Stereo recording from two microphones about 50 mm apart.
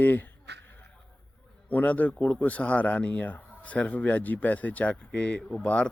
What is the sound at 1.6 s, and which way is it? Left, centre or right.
Speech, left.